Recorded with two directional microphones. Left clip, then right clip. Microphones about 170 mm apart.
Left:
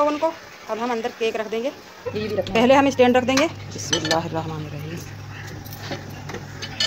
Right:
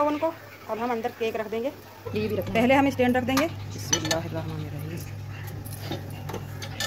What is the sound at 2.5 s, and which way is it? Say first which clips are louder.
Speech: left 6 dB; 15° left (ahead or behind).